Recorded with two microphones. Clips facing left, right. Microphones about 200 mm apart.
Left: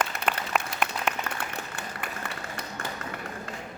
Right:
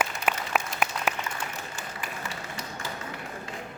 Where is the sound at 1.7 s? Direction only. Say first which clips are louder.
Left 1 dB; 60° left (ahead or behind).